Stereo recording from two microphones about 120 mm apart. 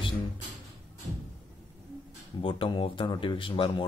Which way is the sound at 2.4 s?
45° left (ahead or behind).